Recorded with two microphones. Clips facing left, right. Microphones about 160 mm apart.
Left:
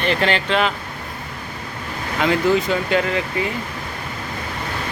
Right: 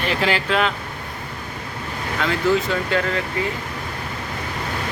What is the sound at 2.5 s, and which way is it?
Speech, 15° left (ahead or behind).